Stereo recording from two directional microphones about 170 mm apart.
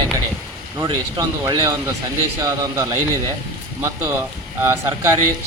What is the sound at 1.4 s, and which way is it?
A man's voice, 20° right (ahead or behind).